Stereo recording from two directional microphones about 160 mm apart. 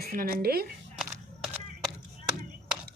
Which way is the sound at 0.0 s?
65° right (ahead or behind).